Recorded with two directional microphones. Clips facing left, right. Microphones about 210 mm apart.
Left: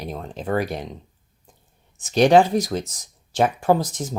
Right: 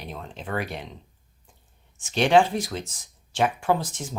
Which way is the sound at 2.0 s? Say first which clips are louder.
Left 4 dB; 40° left (ahead or behind).